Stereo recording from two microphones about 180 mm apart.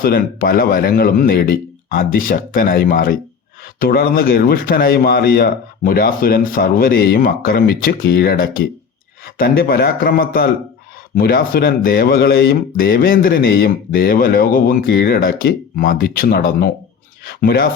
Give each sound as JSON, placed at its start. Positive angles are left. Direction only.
{"t": 0.0, "sound": "a man's voice", "side_deg": 55}